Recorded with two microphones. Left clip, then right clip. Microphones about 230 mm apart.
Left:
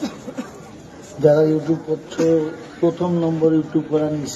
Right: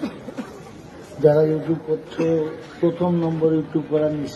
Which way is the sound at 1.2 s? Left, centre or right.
Left.